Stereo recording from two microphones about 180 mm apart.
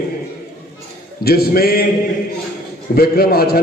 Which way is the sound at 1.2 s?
60° left (ahead or behind).